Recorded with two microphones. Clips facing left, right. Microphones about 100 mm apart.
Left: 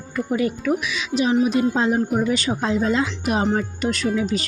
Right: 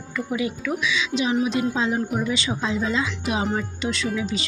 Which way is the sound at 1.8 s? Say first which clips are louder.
Left 4 dB; 50° left (ahead or behind).